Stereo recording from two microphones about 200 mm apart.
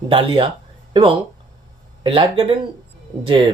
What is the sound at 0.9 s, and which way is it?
Speech, 25° right (ahead or behind).